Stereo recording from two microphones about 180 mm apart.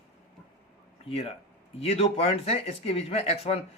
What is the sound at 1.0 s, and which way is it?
Speech, 30° left (ahead or behind).